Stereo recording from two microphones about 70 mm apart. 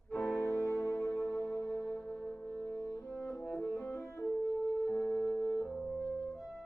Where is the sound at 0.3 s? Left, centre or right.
Left.